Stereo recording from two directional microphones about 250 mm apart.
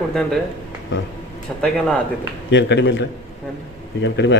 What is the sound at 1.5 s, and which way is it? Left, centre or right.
Speech, centre.